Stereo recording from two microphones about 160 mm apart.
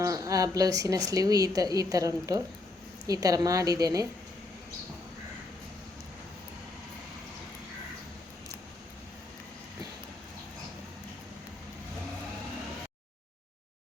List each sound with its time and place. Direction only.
0.0 s a woman's voice: 20° right (ahead or behind)